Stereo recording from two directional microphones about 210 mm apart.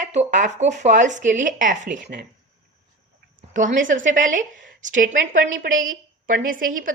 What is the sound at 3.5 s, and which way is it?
Speech, 40° right (ahead or behind).